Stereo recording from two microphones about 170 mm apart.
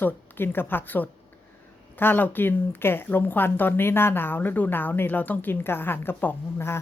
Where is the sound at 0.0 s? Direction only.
10° left (ahead or behind).